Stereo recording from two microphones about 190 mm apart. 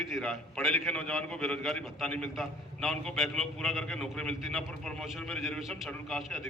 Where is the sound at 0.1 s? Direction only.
5° left (ahead or behind).